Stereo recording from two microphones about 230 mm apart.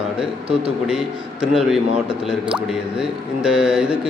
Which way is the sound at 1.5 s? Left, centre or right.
Centre.